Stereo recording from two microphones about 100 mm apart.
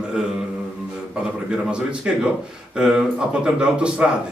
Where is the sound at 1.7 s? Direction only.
10° right (ahead or behind).